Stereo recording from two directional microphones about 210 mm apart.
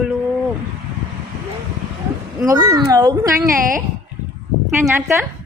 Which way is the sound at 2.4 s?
15° right (ahead or behind).